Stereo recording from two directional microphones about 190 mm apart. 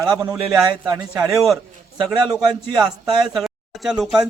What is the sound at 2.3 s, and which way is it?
Speech, 20° right (ahead or behind).